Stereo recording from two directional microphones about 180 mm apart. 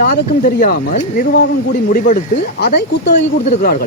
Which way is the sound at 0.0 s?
55° left (ahead or behind).